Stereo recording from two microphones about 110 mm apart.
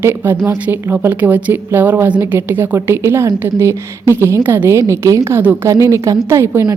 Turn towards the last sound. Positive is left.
turn(degrees=-25)  # may be behind; listen again after turning